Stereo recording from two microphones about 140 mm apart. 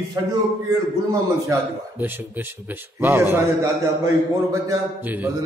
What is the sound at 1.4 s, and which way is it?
A man's voice, 20° right (ahead or behind).